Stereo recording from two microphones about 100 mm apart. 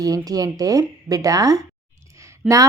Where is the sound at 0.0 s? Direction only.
40° right (ahead or behind).